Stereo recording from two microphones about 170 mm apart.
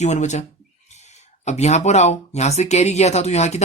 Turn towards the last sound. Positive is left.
turn(degrees=40)  # may be behind; listen again after turning